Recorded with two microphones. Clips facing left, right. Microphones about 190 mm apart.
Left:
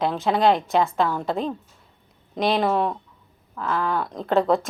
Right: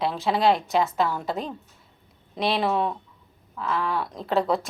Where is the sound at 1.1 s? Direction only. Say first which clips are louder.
Left 3 dB; 50° left (ahead or behind).